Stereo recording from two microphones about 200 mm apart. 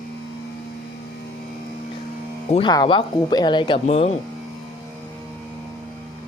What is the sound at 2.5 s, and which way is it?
Speech, 20° left (ahead or behind).